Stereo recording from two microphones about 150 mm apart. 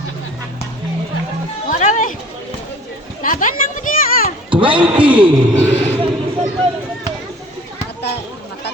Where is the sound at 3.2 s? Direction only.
60° left (ahead or behind).